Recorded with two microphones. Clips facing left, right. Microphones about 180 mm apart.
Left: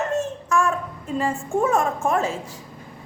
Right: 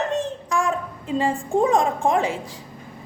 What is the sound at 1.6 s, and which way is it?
Speech, 15° right (ahead or behind).